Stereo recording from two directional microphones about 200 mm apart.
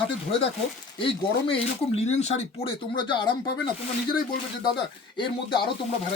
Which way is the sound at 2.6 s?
25° left (ahead or behind).